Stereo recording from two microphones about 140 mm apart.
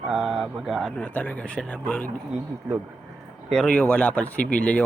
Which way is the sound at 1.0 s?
10° left (ahead or behind).